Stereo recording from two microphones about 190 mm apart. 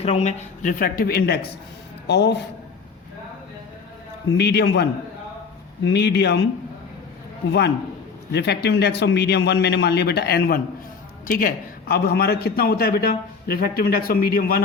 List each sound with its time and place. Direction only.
0.0 s a man's voice: 35° left (ahead or behind); by 2.3 s 60° left (ahead or behind)
4.3 s speech: 60° left (ahead or behind)
8.3 s a man's voice: 60° left (ahead or behind)